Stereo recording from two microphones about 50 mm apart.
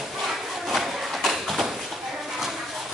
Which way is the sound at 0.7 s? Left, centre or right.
Centre.